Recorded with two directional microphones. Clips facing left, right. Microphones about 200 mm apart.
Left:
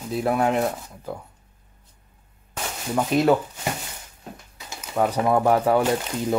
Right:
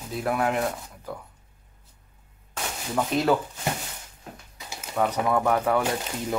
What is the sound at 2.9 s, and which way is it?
Speech, 15° left (ahead or behind).